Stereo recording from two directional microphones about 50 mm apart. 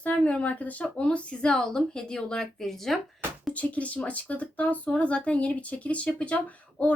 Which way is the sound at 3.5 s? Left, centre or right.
Left.